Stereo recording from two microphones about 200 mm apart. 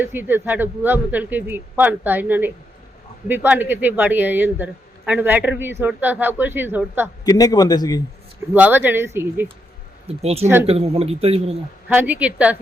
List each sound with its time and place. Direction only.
0.0 s a man's voice: 10° right (ahead or behind)
7.3 s a man's voice: 20° left (ahead or behind)
8.5 s a man's voice: 5° right (ahead or behind)
10.1 s a man's voice: 30° right (ahead or behind)
11.9 s a man's voice: 10° right (ahead or behind)